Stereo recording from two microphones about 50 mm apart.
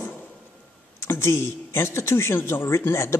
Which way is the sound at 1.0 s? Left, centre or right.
Left.